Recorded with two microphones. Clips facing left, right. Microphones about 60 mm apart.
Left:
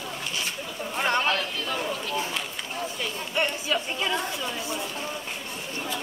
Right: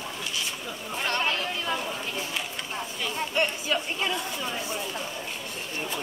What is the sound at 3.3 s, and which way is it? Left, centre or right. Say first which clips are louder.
Chatter: left 1 dB; centre.